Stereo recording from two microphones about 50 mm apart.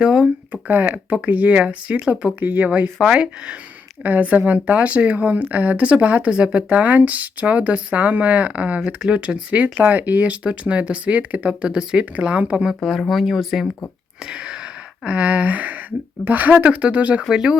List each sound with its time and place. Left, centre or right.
0.0 s speech: centre
0.5 s speech: right
3.0 s speech: centre
4.0 s speech: right
6.7 s speech: right
9.7 s speech: right
10.4 s speech: right
11.6 s speech: centre
13.0 s speech: centre
14.3 s speech: centre
15.0 s speech: right
17.2 s speech: centre